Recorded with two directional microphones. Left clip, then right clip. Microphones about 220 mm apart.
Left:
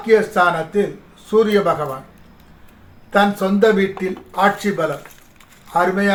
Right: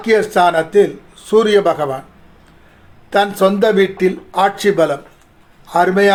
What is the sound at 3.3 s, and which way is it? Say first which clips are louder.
Speech: right 3 dB; 45° right (ahead or behind).